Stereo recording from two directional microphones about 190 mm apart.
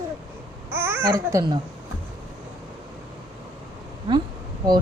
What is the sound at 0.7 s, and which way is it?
Speech, 15° right (ahead or behind).